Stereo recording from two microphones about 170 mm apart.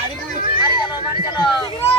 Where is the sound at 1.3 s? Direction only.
30° left (ahead or behind).